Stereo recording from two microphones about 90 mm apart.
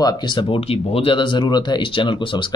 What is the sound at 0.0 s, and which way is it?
Speech, 60° left (ahead or behind).